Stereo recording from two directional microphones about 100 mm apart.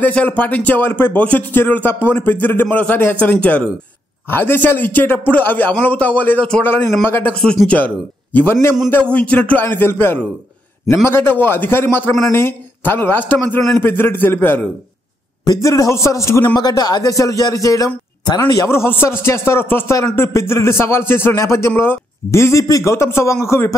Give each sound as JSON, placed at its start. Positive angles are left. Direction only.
{"t": 0.0, "sound": "speech", "side_deg": 15}
{"t": 15.4, "sound": "a man's voice", "side_deg": 35}
{"t": 16.5, "sound": "a man's voice", "side_deg": 40}
{"t": 18.7, "sound": "speech", "side_deg": 25}